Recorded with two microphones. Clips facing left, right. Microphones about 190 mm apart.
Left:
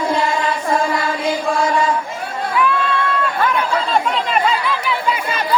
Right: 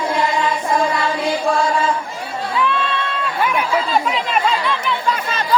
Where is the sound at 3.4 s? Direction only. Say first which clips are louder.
Right 2 dB; 5° right (ahead or behind).